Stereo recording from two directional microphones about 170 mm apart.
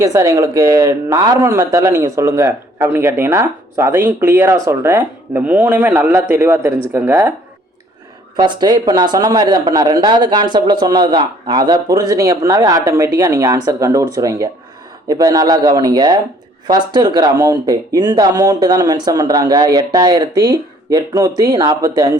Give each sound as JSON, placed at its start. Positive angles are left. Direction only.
{"t": 0.0, "sound": "speech", "side_deg": -20}
{"t": 8.4, "sound": "speech", "side_deg": -25}